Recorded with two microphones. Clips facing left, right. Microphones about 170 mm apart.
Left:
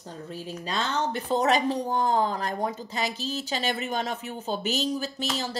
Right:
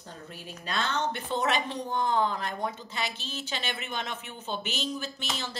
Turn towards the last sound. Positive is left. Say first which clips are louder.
# left 6 dB
turn(degrees=40)  # may be behind; listen again after turning